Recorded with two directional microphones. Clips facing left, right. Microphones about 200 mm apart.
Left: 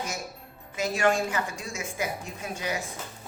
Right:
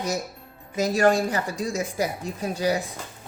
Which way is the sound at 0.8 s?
40° right (ahead or behind).